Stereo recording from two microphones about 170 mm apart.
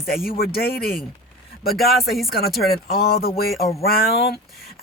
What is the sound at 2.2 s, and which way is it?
Speech, 65° left (ahead or behind).